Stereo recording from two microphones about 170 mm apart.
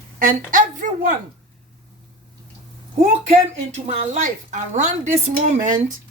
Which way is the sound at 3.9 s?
45° right (ahead or behind).